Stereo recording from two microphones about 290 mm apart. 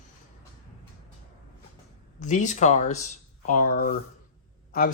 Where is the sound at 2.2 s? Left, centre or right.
Left.